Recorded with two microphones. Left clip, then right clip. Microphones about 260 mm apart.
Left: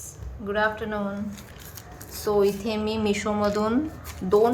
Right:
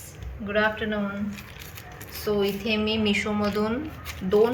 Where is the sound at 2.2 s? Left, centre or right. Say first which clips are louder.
Left 3 dB; left.